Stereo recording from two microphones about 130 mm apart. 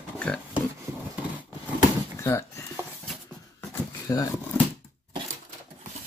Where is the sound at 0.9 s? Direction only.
20° right (ahead or behind).